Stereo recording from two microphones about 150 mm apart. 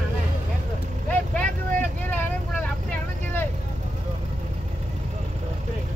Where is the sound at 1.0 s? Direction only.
5° left (ahead or behind).